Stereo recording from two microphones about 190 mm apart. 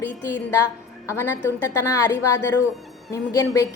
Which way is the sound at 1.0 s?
10° left (ahead or behind).